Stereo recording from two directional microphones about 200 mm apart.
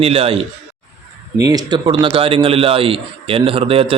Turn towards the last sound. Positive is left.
turn(degrees=-30)  # may be behind; listen again after turning